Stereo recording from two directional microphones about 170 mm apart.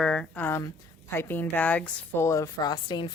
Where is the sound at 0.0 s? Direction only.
5° left (ahead or behind).